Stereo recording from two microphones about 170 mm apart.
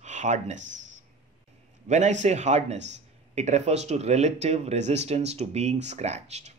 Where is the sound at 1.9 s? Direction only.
45° right (ahead or behind).